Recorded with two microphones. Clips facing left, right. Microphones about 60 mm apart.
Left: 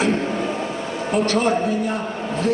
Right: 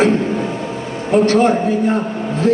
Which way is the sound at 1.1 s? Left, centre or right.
Right.